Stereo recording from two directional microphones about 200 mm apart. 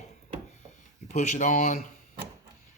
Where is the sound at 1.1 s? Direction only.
35° left (ahead or behind).